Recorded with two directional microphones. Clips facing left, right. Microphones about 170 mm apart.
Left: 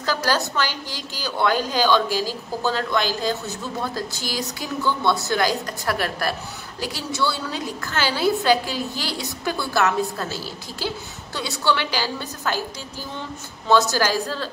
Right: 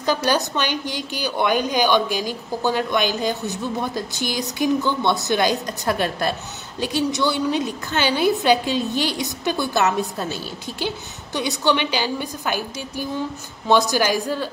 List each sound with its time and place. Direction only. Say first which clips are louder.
0.0 s a woman's voice: right 3 dB; 20° right (ahead or behind)